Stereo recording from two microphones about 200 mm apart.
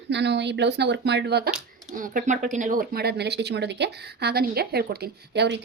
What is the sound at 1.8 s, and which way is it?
Speech, 40° right (ahead or behind).